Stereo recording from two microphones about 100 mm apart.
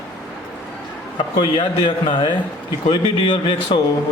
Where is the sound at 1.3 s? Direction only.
55° left (ahead or behind).